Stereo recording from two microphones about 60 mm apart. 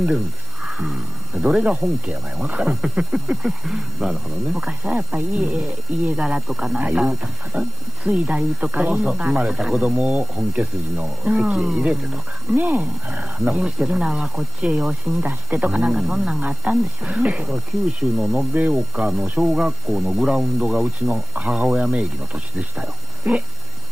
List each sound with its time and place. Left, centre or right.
0.7 s speech: centre
3.1 s speech: centre
12.5 s speech: right; by 18.5 s centre
18.5 s speech: right
18.9 s speech: centre
19.2 s speech: right
19.5 s speech: centre